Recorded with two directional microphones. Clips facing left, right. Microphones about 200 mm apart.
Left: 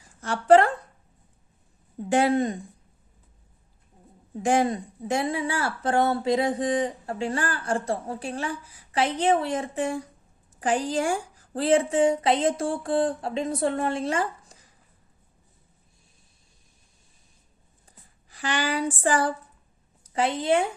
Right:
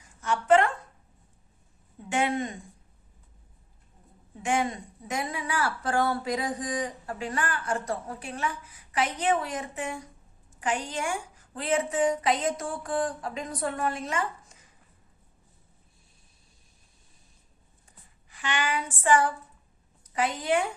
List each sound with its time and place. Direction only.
0.2 s a woman's voice: 35° left (ahead or behind)
2.0 s speech: 35° left (ahead or behind)
4.4 s speech: 35° left (ahead or behind)
18.3 s speech: 35° left (ahead or behind)